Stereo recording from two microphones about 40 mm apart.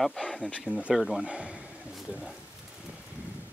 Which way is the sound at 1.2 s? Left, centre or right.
Right.